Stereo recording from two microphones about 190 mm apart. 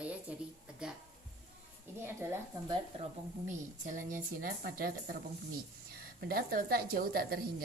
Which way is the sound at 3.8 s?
45° right (ahead or behind).